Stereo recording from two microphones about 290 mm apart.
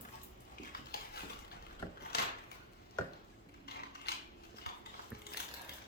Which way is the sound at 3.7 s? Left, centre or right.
Left.